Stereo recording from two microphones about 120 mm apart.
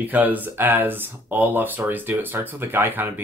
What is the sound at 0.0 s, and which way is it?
Speech, 15° right (ahead or behind).